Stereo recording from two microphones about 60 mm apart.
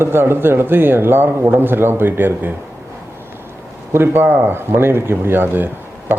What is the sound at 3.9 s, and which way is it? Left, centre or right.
Speech, right.